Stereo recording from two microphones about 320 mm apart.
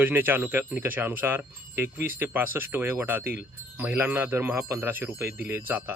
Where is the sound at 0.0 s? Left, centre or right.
Centre.